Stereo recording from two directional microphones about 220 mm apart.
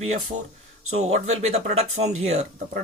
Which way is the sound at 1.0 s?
30° right (ahead or behind).